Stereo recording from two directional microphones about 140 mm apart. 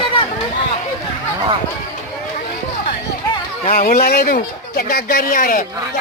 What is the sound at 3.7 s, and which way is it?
Speech, 75° left (ahead or behind).